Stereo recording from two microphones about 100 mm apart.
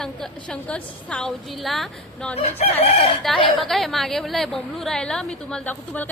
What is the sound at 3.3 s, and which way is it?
A woman's voice, 5° left (ahead or behind).